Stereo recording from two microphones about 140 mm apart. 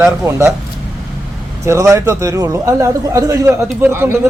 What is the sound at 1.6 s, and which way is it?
A man's voice, 20° right (ahead or behind).